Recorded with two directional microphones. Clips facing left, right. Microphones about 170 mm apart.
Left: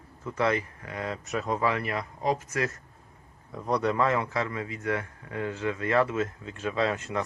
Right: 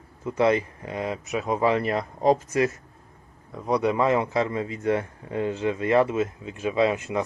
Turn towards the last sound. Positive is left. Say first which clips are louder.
# right 5 dB
turn(degrees=-15)  # may be behind; listen again after turning